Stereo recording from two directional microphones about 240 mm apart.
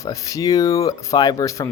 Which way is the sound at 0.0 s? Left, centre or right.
Centre.